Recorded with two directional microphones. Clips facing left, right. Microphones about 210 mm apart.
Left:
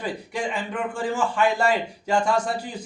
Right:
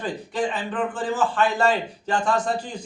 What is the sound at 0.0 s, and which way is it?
A man's voice, 10° left (ahead or behind).